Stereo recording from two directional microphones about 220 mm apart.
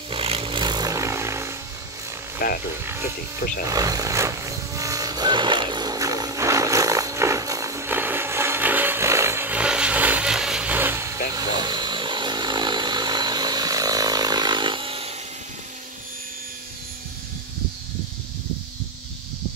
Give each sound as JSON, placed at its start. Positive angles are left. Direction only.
{"t": 0.1, "sound": "a sound", "side_deg": -25}
{"t": 2.4, "sound": "speech", "side_deg": 40}
{"t": 3.6, "sound": "vehicle", "side_deg": -15}